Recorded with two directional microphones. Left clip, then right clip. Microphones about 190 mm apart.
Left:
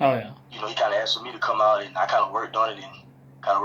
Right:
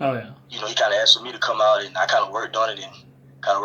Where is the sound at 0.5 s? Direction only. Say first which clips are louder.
Right 3 dB; 45° right (ahead or behind).